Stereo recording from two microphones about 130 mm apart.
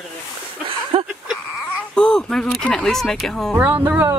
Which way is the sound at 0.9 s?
50° right (ahead or behind).